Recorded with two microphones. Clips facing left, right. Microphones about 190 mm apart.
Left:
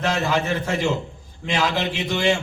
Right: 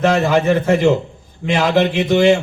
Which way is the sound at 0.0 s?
55° right (ahead or behind).